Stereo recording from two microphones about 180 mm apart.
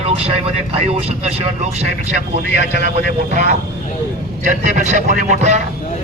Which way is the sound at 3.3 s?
40° right (ahead or behind).